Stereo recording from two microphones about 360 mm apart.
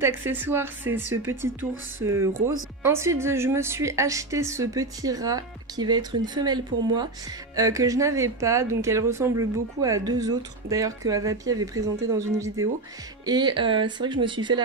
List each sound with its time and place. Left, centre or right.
0.0 s a woman's voice: centre